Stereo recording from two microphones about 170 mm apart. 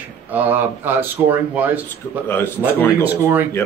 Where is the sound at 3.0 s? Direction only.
10° right (ahead or behind).